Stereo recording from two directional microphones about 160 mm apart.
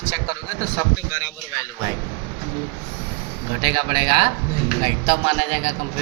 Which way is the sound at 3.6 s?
30° right (ahead or behind).